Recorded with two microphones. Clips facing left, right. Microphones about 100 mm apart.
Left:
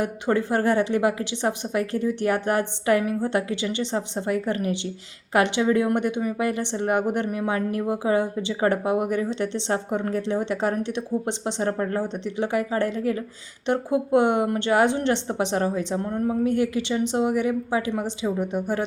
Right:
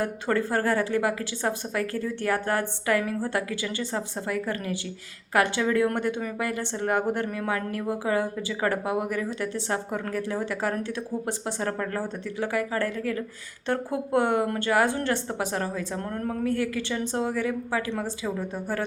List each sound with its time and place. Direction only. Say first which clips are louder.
0.0 s speech: left 3 dB; 20° left (ahead or behind)